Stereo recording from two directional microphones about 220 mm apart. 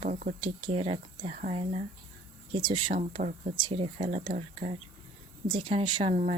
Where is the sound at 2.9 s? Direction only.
35° right (ahead or behind).